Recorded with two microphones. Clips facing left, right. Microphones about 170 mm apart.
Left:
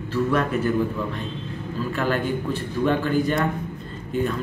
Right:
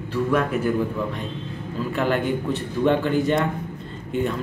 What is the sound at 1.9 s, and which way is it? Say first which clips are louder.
Speech: right 2 dB; 20° right (ahead or behind).